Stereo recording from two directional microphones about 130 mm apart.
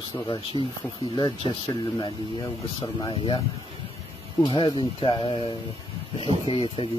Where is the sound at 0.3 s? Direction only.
40° left (ahead or behind).